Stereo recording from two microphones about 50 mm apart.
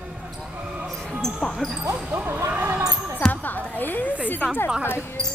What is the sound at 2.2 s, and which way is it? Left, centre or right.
Basketball bounce, right.